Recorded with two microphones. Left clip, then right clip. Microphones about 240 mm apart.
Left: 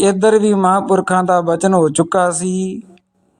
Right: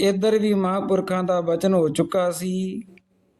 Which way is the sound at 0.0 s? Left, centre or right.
Left.